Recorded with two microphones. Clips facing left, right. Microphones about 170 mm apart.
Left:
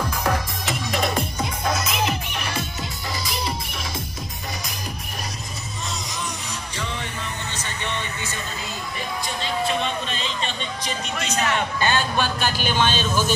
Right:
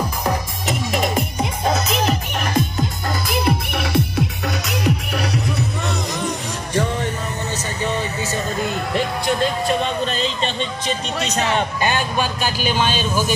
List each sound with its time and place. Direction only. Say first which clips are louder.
0.2 s music: right 2 dB; 15° right (ahead or behind)
1.6 s music: right 4 dB; 35° right (ahead or behind)
2.3 s music: right 8 dB; 45° right (ahead or behind); by 5.4 s 70° right (ahead or behind)
5.9 s music: right 8 dB; 55° right (ahead or behind)
7.5 s a sound: right 8 dB; 40° right (ahead or behind)
8.5 s music: right 10 dB; 60° right (ahead or behind)
9.7 s a sound: right 5 dB; 40° right (ahead or behind)
11.8 s speech: right 2 dB; 10° right (ahead or behind)